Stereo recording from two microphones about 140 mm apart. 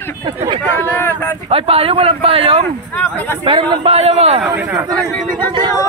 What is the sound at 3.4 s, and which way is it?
A man's voice, 40° right (ahead or behind).